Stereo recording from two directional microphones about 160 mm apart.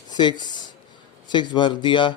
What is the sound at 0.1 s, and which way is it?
A man's voice, 25° left (ahead or behind).